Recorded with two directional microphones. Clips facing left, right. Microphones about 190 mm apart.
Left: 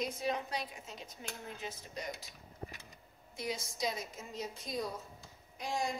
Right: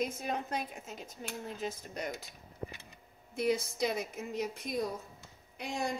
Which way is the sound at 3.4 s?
60° right (ahead or behind).